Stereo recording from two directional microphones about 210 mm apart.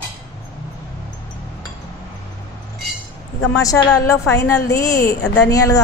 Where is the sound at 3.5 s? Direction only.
15° left (ahead or behind).